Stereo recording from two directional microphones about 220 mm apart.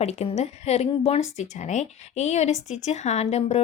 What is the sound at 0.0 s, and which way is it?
A woman's voice, 30° left (ahead or behind).